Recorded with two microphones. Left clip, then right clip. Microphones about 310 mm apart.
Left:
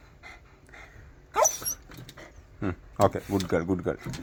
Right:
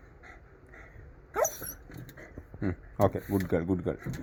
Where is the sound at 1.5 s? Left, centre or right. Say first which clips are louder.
Left 10 dB; left.